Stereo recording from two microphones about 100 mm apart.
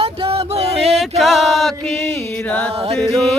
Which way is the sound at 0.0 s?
70° right (ahead or behind).